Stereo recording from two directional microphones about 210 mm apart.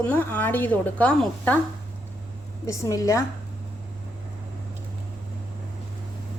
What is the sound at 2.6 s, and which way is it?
Speech, 15° left (ahead or behind).